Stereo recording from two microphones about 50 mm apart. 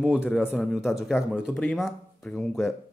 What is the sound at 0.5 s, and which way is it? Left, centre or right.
Speech, centre.